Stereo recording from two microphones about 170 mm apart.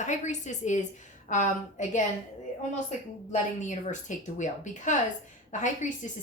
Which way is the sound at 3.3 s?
45° left (ahead or behind).